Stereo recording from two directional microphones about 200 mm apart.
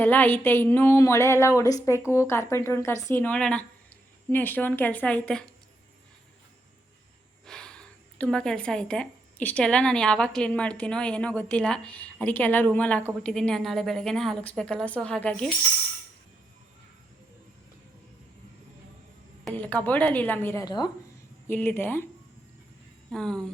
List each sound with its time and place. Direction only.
0.0 s speech: 10° left (ahead or behind)
7.4 s a woman's voice: 5° left (ahead or behind)
19.5 s speech: 5° left (ahead or behind)
20.7 s speech: 20° left (ahead or behind)
21.4 s speech: 10° left (ahead or behind)
23.1 s a woman's voice: 5° left (ahead or behind)